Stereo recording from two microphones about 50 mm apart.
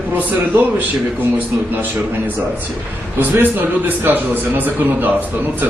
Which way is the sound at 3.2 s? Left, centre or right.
Right.